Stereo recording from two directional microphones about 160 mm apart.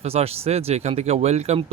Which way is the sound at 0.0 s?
40° right (ahead or behind).